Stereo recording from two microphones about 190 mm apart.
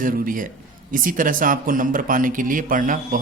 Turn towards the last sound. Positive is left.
turn(degrees=-45)  # may be behind; listen again after turning